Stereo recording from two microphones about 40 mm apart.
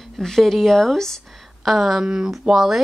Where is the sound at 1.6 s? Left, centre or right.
Centre.